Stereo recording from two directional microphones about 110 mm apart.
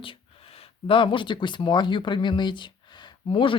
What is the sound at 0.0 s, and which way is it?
Speech, 55° left (ahead or behind).